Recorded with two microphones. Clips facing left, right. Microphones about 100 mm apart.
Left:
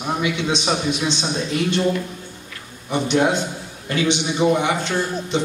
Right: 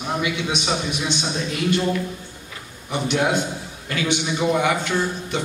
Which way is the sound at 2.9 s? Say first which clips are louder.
Left 3 dB; 20° left (ahead or behind).